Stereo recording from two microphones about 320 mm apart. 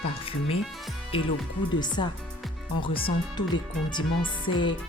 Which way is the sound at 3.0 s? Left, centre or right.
Centre.